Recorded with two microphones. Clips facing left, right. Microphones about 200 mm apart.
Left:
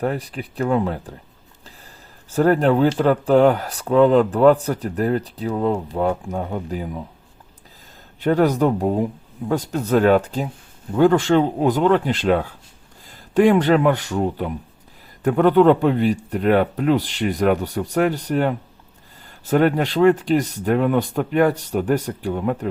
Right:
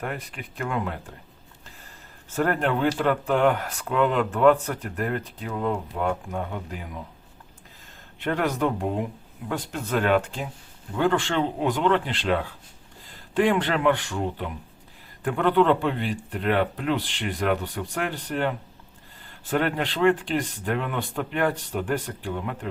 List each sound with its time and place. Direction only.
0.0 s speech: 35° left (ahead or behind)
2.3 s speech: 35° left (ahead or behind)
8.2 s speech: 35° left (ahead or behind)